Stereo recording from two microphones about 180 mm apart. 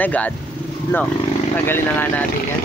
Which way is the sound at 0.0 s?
10° left (ahead or behind).